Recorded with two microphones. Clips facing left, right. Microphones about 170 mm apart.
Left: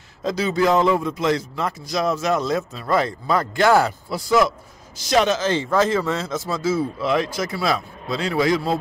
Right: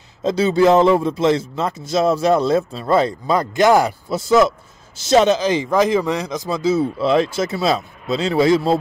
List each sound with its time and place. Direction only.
0.2 s a man's voice: 25° right (ahead or behind)